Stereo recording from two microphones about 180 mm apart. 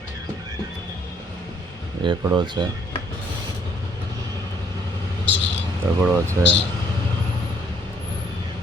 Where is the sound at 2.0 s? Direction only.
25° right (ahead or behind).